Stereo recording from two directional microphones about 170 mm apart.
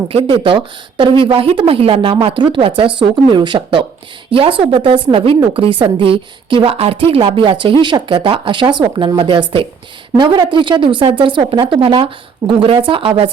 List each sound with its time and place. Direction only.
0.1 s a woman's voice: 35° right (ahead or behind)